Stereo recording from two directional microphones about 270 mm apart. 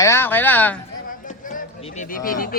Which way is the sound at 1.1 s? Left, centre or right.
Left.